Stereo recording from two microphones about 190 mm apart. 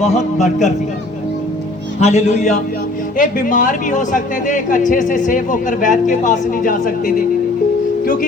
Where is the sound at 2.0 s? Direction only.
35° left (ahead or behind).